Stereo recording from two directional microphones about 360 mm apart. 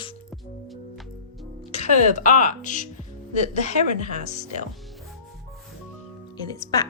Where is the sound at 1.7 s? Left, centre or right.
Centre.